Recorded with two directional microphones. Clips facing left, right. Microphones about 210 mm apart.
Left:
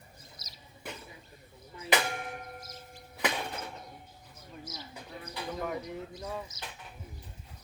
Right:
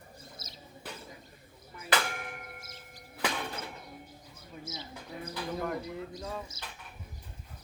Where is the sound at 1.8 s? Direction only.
30° left (ahead or behind).